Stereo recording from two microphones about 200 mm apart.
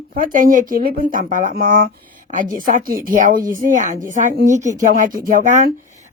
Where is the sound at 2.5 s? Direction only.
45° right (ahead or behind).